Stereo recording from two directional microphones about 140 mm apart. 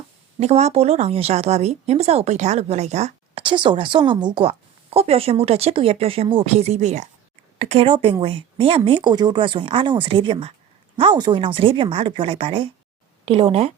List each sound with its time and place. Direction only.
0.3 s a woman's voice: 50° right (ahead or behind)
3.4 s a woman's voice: 35° right (ahead or behind)